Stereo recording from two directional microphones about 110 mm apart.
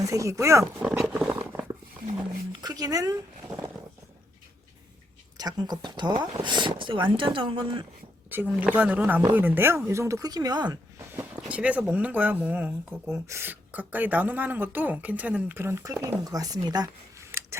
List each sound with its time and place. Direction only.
0.0 s speech: 30° right (ahead or behind)
0.9 s a sound: 5° right (ahead or behind)
2.5 s speech: 35° right (ahead or behind)
5.4 s speech: 40° right (ahead or behind)
8.3 s speech: 15° right (ahead or behind); by 10.8 s 40° right (ahead or behind)
11.2 s speech: 10° right (ahead or behind)
13.1 s speech: 25° right (ahead or behind)